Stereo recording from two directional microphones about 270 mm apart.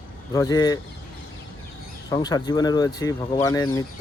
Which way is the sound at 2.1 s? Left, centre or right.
Centre.